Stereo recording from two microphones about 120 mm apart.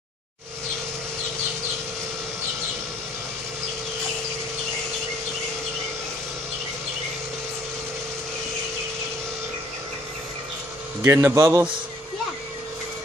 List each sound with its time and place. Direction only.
11.0 s speech: 20° right (ahead or behind)